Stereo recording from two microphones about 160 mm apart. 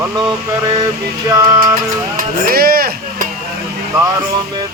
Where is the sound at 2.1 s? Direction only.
65° right (ahead or behind).